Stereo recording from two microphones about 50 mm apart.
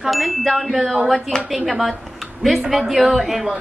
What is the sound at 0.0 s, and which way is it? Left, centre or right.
A woman's voice, centre.